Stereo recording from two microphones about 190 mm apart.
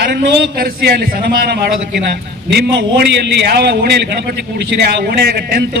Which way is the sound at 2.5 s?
60° right (ahead or behind).